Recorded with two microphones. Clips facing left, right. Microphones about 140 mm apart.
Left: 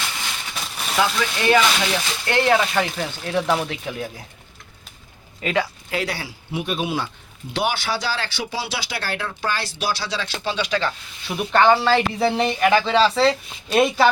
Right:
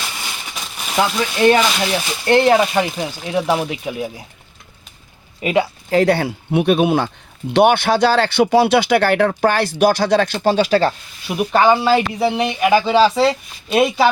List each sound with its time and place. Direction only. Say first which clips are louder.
0.5 s a sound: even; centre (ahead or behind)
1.0 s speech: right 8 dB; 30° right (ahead or behind)
2.6 s speech: right 5 dB; 15° right (ahead or behind)
5.4 s speech: right 5 dB; 15° right (ahead or behind)
5.9 s speech: right 12 dB; 50° right (ahead or behind)
11.3 s speech: right 2 dB; 15° right (ahead or behind)